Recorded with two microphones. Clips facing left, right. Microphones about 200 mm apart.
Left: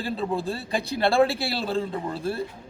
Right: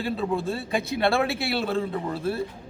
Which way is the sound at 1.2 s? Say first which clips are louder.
Left 3 dB; 30° left (ahead or behind).